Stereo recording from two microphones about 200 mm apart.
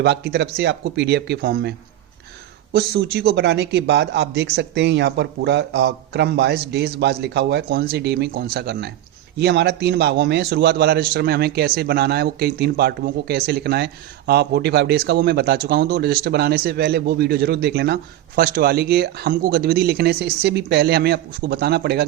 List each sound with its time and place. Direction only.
0.0 s speech: 55° right (ahead or behind)
2.7 s a man's voice: 55° right (ahead or behind)